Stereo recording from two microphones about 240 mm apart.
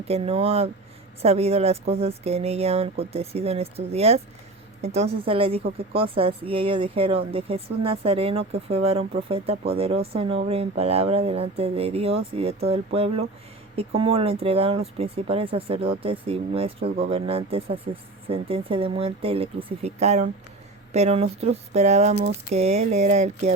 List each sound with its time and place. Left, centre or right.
0.1 s speech: right